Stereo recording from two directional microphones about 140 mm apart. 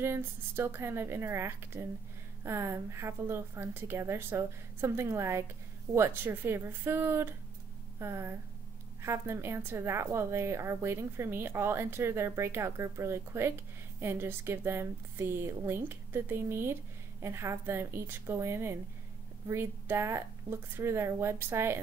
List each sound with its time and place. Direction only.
0.0 s a woman's voice: 15° right (ahead or behind)